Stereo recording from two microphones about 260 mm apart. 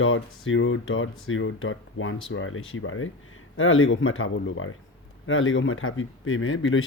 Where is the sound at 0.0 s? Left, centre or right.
Left.